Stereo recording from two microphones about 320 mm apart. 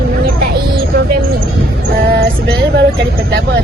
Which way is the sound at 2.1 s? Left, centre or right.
Right.